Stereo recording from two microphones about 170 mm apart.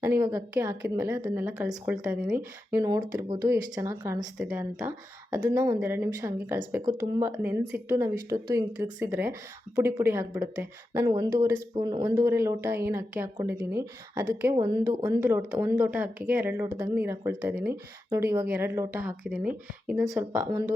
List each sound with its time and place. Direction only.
0.0 s a woman's voice: 20° right (ahead or behind)
4.4 s speech: 5° right (ahead or behind)
4.8 s a woman's voice: 15° right (ahead or behind)